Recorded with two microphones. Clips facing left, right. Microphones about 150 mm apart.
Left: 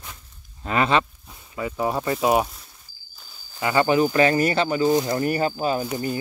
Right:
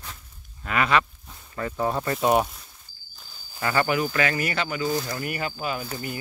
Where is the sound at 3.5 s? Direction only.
15° left (ahead or behind); by 5.9 s 35° left (ahead or behind).